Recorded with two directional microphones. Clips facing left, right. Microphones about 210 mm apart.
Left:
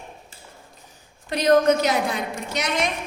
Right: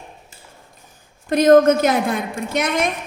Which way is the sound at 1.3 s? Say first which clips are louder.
Right 6 dB; 50° right (ahead or behind).